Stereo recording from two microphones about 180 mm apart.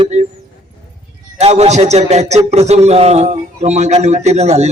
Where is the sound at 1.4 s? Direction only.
35° right (ahead or behind).